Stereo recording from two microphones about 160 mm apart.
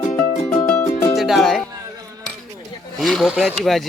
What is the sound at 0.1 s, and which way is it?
Music, 20° left (ahead or behind).